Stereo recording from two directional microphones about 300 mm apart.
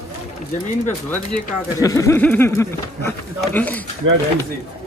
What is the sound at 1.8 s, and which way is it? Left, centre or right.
A man's voice, centre.